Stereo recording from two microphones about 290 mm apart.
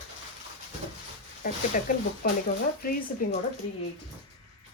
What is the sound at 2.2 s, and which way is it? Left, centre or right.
Speech, left.